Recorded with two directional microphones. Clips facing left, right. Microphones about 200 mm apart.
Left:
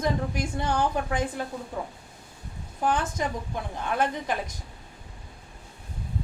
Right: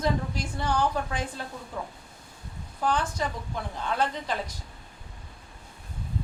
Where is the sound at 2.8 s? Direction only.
20° left (ahead or behind).